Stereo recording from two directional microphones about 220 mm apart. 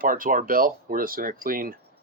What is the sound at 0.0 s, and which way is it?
Speech, 40° right (ahead or behind).